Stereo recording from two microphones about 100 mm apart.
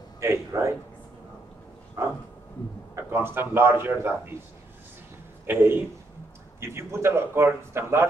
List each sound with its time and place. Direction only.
0.2 s speech: 30° right (ahead or behind)
2.0 s dog: 30° right (ahead or behind)
3.0 s speech: 25° right (ahead or behind)
5.5 s speech: 20° right (ahead or behind)